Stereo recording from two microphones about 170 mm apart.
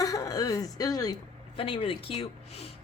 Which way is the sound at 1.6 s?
35° left (ahead or behind).